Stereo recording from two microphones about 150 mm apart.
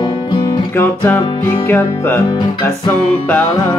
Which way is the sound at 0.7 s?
15° left (ahead or behind).